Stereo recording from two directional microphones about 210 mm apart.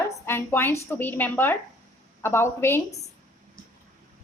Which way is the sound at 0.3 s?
10° left (ahead or behind).